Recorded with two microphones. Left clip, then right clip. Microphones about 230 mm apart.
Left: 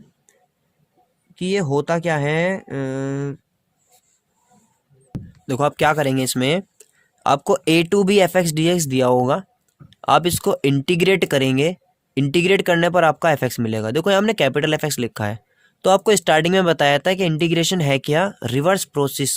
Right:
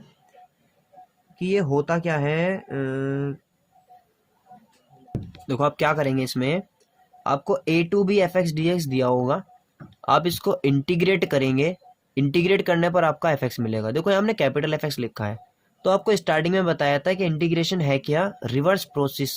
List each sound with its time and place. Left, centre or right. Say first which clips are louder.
1.4 s speech: left 2 dB; left
5.5 s speech: left 4 dB; left